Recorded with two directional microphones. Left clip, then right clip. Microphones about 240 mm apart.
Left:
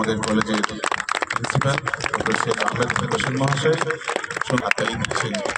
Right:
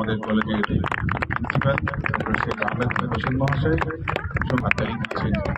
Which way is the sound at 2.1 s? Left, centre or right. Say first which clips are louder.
Left 3 dB; left.